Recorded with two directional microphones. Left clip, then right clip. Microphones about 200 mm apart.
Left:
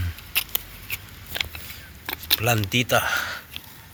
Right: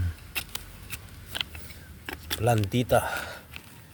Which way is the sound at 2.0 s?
20° right (ahead or behind).